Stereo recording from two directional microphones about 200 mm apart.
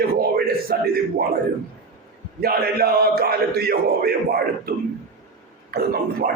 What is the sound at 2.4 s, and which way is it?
A man's voice, 50° right (ahead or behind).